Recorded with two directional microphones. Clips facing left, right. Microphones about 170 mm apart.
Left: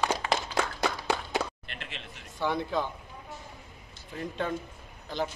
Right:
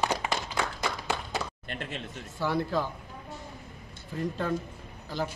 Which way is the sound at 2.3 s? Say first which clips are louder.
Right 1 dB; 5° right (ahead or behind).